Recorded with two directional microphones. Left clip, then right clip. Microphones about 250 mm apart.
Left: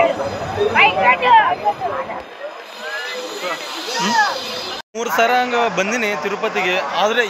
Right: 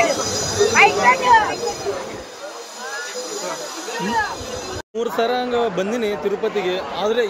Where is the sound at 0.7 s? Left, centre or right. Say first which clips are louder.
Left 1 dB; centre.